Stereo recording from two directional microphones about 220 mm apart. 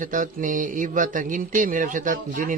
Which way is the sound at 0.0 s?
35° right (ahead or behind).